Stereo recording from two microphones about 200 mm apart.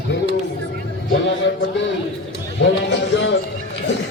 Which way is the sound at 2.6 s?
65° left (ahead or behind).